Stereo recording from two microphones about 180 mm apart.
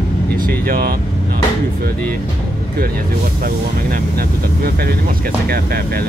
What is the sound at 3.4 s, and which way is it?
Speech, 55° right (ahead or behind).